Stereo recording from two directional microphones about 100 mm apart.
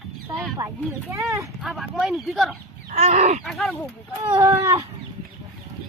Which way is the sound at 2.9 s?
90° right.